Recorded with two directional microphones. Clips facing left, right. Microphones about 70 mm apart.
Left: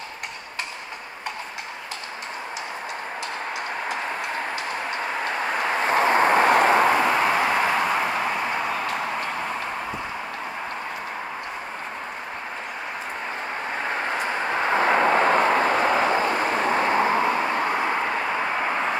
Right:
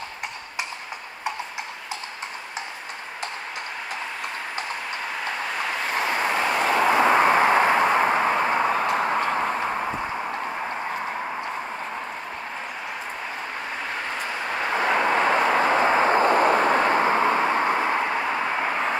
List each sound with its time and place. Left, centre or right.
5.7 s vehicle: left
6.9 s a sound: centre
14.5 s vehicle: left
15.5 s vehicle: right
17.4 s vehicle: centre